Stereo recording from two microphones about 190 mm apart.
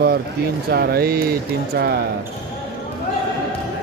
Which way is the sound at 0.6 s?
55° right (ahead or behind).